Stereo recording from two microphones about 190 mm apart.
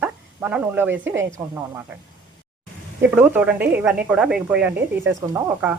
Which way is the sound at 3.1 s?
10° right (ahead or behind).